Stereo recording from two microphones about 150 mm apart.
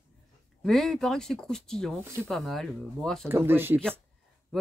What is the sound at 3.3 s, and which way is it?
Speech, 15° right (ahead or behind).